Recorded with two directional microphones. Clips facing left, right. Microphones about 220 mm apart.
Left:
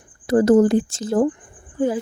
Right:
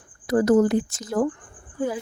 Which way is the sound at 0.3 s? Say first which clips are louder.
Left 4 dB; 30° left (ahead or behind).